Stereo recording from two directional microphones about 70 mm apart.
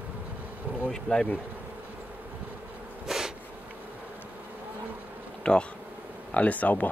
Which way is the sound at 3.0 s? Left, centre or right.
Centre.